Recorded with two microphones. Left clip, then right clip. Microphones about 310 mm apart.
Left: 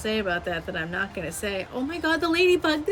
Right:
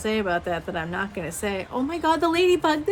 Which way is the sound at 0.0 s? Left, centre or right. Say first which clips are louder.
Right 2 dB; centre.